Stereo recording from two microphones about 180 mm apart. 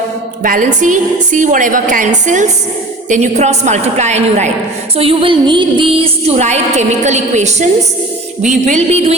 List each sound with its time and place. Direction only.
0.4 s a woman's voice: 45° right (ahead or behind)